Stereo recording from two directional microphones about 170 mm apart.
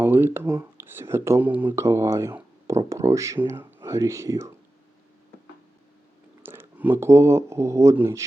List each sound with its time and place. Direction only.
0.0 s speech: 10° right (ahead or behind)
6.4 s speech: 15° right (ahead or behind)